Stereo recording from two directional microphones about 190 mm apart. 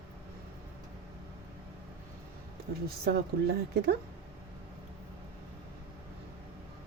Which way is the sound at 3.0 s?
55° right (ahead or behind).